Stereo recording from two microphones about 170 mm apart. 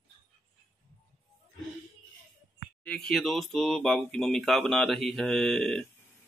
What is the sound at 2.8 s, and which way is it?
Speech, 5° left (ahead or behind).